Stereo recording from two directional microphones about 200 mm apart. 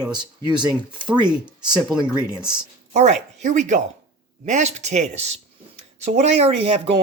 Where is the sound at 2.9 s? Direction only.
35° right (ahead or behind).